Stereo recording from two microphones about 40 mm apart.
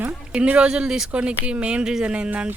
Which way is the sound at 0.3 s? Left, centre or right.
Right.